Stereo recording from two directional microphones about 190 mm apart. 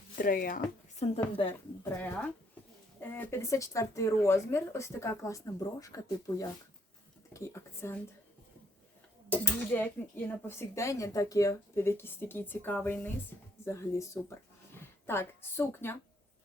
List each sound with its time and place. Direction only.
0.2 s speech: 50° left (ahead or behind)
0.9 s a woman's voice: 30° left (ahead or behind)
1.8 s speech: 10° left (ahead or behind)
9.3 s speech: 10° left (ahead or behind)